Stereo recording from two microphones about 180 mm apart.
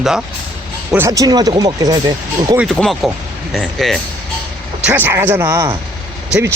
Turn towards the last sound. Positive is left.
turn(degrees=-15)  # may be behind; listen again after turning